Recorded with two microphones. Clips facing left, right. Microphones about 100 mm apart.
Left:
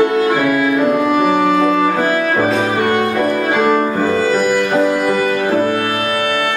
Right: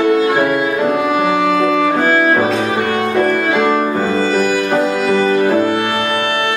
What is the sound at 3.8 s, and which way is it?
Music, 15° right (ahead or behind).